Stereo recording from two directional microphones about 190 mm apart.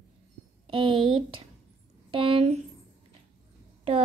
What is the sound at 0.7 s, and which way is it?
A woman's voice, 25° right (ahead or behind).